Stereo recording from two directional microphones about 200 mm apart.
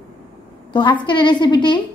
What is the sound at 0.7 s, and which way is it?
A woman's voice, 25° left (ahead or behind).